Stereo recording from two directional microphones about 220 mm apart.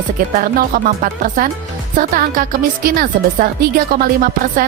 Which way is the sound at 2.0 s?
40° right (ahead or behind).